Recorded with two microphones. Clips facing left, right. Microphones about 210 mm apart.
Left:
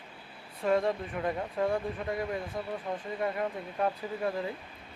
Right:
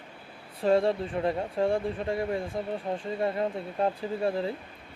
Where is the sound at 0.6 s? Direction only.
30° right (ahead or behind).